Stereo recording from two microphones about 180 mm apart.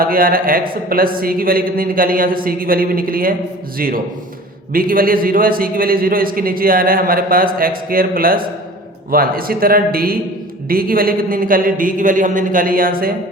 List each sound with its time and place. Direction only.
0.0 s a man's voice: 50° right (ahead or behind)